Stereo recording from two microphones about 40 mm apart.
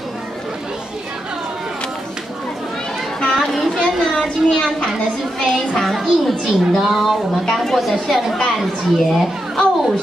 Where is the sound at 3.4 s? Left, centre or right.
Centre.